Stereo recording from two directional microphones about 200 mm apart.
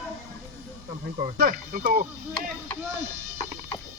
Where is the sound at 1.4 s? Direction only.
45° right (ahead or behind).